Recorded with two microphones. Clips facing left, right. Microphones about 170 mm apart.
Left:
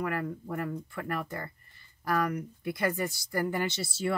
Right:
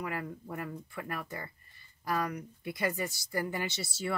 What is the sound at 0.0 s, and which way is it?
Speech, 55° left (ahead or behind).